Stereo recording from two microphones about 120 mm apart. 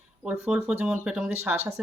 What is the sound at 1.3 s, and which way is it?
Speech, 15° right (ahead or behind).